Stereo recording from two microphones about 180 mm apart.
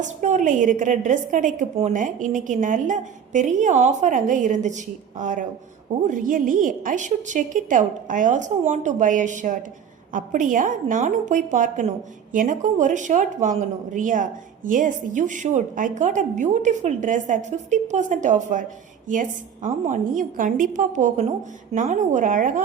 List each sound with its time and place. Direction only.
0.0 s speech: 45° right (ahead or behind)
19.6 s speech: 45° right (ahead or behind)